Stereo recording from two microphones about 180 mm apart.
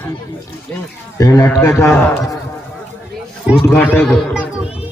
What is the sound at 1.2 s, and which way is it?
A man's voice, 15° left (ahead or behind).